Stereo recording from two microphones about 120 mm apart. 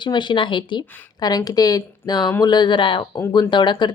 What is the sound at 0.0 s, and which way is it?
Speech, 40° left (ahead or behind).